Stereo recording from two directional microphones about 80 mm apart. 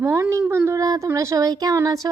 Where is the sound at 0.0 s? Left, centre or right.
Right.